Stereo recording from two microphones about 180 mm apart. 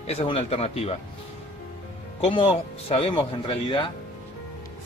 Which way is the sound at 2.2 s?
35° left (ahead or behind).